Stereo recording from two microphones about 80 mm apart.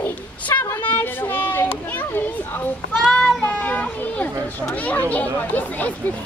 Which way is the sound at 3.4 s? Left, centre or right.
Left.